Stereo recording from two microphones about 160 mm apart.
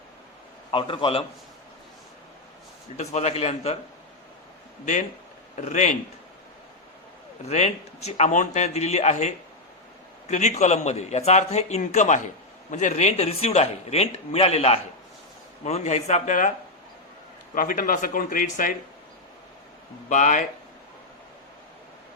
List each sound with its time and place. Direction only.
0.7 s speech: 35° left (ahead or behind)
3.0 s speech: 45° left (ahead or behind)
5.5 s a man's voice: 45° left (ahead or behind)
7.4 s a man's voice: 45° left (ahead or behind)
17.5 s speech: 60° left (ahead or behind)
20.1 s a man's voice: 50° left (ahead or behind)